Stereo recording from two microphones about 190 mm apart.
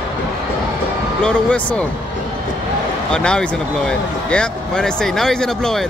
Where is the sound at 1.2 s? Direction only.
5° left (ahead or behind).